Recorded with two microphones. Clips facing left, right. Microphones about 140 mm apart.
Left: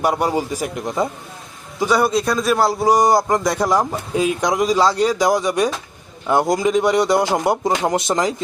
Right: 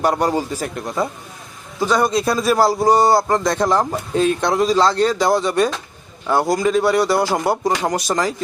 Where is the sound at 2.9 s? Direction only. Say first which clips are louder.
Left 1 dB; 15° left (ahead or behind).